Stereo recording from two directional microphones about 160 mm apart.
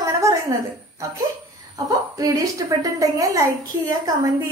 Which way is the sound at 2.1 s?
20° right (ahead or behind).